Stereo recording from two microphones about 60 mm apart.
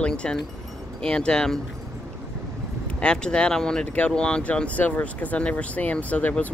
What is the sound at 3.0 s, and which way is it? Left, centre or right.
Speech, centre.